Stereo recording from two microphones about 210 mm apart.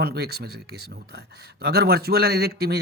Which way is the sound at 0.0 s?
50° right (ahead or behind).